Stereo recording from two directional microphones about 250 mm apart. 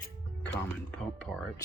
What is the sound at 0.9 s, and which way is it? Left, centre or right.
Speech, centre.